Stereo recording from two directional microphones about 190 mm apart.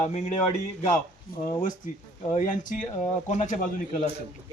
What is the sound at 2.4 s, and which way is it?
A man's voice, 40° left (ahead or behind).